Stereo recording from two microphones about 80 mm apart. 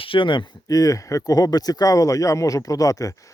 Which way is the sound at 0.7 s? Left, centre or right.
Left.